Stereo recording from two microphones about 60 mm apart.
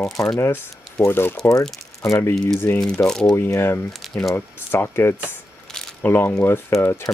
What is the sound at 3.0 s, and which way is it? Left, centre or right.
Speech, centre.